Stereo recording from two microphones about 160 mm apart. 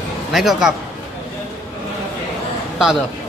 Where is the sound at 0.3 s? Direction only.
Centre (ahead or behind).